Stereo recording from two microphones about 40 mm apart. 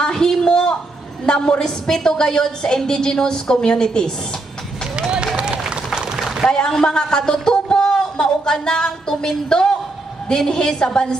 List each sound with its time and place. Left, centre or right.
0.0 s a sound: centre
1.2 s a woman's voice: left
5.1 s run: right
6.5 s a woman's voice: centre